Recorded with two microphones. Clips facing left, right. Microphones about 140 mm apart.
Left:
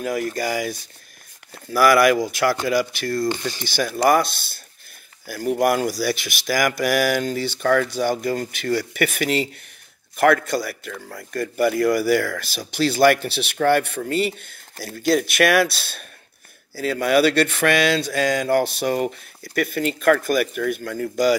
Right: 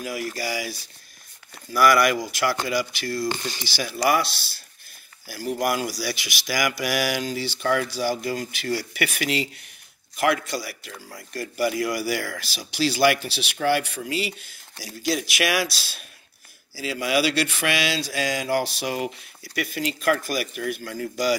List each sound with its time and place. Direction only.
0.0 s a man's voice: 50° left (ahead or behind)